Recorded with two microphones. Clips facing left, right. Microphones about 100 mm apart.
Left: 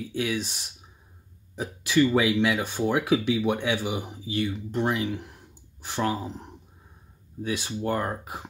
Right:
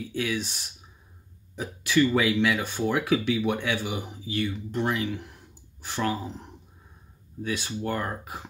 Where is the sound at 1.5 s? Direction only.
20° left (ahead or behind).